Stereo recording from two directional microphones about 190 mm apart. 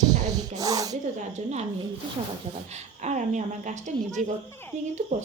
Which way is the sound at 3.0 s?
40° right (ahead or behind).